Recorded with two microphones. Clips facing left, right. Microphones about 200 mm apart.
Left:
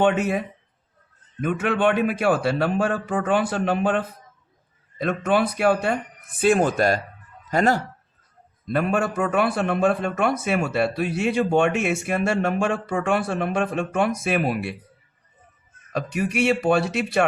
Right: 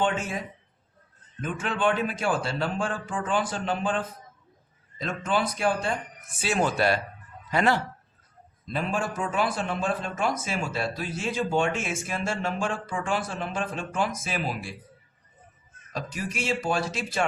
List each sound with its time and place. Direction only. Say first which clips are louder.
0.0 s a man's voice: left 7 dB; 65° left (ahead or behind)
6.4 s speech: left 6 dB; 50° left (ahead or behind)
8.6 s a man's voice: left 7 dB; 60° left (ahead or behind)
15.9 s a man's voice: left 8 dB; 65° left (ahead or behind)